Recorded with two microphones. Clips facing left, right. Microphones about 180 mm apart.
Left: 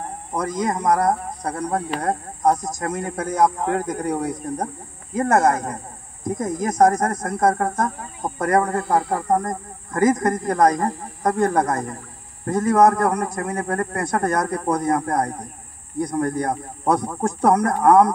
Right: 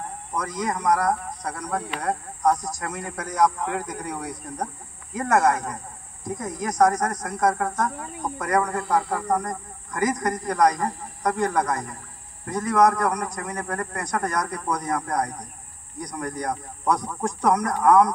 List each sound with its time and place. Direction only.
0.4 s speech: 45° left (ahead or behind)
2.5 s a man's voice: 20° left (ahead or behind)
2.8 s speech: 40° left (ahead or behind)